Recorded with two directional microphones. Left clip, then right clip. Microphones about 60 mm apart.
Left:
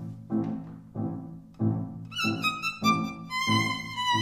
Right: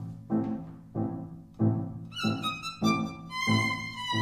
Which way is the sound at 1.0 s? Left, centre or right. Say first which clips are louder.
Right 1 dB; left.